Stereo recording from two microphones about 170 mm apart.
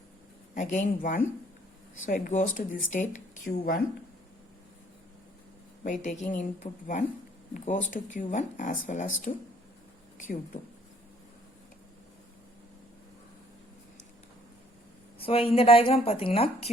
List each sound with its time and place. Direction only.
0.5 s speech: 50° left (ahead or behind)
5.8 s speech: 50° left (ahead or behind)
15.2 s a woman's voice: 35° left (ahead or behind)